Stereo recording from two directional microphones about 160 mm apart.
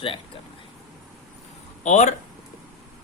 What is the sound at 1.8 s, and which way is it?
Speech, 45° left (ahead or behind).